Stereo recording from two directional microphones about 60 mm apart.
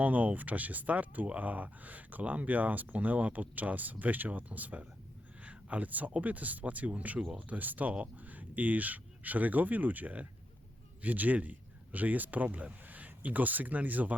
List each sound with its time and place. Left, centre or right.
0.0 s speech: right